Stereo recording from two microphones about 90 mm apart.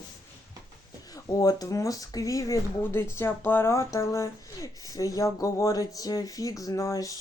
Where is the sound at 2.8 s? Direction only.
25° left (ahead or behind).